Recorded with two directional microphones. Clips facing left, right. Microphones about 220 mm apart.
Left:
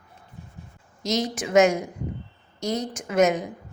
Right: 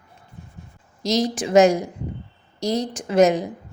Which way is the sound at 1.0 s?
35° right (ahead or behind).